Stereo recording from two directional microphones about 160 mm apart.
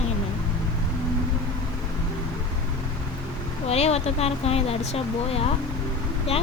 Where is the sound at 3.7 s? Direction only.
40° left (ahead or behind).